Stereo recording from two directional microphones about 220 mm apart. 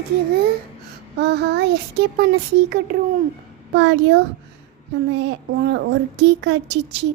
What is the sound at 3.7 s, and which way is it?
Speech, 55° right (ahead or behind).